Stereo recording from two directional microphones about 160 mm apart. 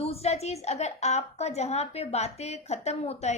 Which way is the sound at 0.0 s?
40° left (ahead or behind).